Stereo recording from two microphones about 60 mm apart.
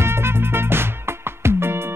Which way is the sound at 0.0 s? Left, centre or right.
Right.